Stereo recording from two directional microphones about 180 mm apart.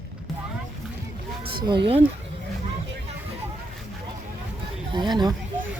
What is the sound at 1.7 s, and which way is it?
Speech, 30° right (ahead or behind).